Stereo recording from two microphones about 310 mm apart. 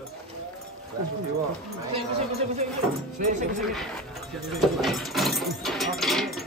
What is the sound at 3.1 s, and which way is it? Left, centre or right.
Speech, right.